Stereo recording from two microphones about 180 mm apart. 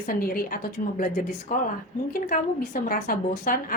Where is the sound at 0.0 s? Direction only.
50° left (ahead or behind).